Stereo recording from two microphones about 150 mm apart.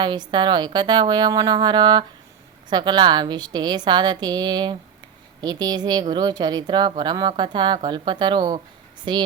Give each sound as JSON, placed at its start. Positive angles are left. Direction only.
{"t": 0.0, "sound": "a woman's voice", "side_deg": -30}